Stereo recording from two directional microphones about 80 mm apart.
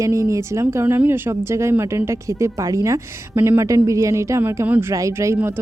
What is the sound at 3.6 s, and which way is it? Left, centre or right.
A woman's voice, right.